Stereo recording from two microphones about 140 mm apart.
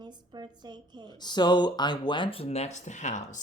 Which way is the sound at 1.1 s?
30° left (ahead or behind).